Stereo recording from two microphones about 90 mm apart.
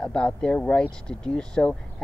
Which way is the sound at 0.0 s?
10° left (ahead or behind).